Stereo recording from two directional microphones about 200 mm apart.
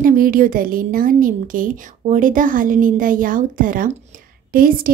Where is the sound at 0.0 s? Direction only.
45° right (ahead or behind).